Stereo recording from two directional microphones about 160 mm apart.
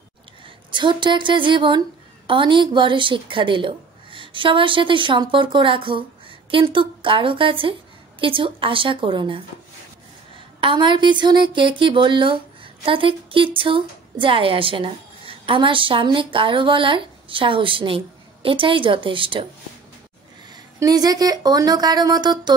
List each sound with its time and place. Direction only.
0.7 s a woman's voice: 30° right (ahead or behind)
20.5 s speech: 25° right (ahead or behind)